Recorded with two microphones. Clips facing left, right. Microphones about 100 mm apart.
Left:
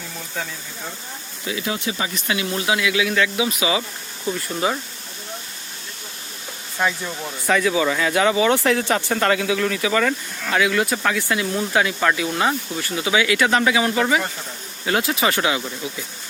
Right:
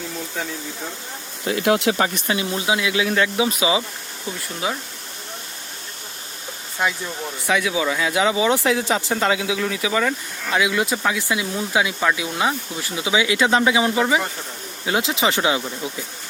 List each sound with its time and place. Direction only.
1.5 s speech: 60° right (ahead or behind)
2.2 s speech: 30° right (ahead or behind)
4.6 s speech: centre (ahead or behind)
6.8 s speech: 20° right (ahead or behind)
7.4 s speech: 5° right (ahead or behind); by 15.6 s 20° right (ahead or behind)